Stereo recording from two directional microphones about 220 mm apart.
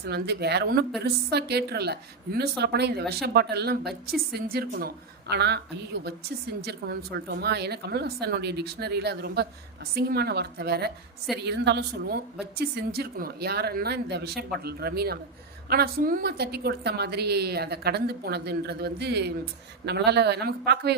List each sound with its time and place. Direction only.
0.0 s a woman's voice: 45° right (ahead or behind)